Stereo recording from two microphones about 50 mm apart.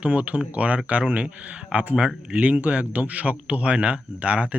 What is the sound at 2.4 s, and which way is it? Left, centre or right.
Speech, right.